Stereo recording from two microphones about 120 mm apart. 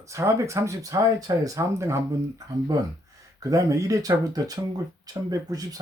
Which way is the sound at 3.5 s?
25° right (ahead or behind).